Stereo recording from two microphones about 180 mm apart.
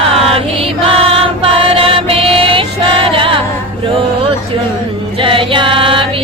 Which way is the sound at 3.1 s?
30° right (ahead or behind).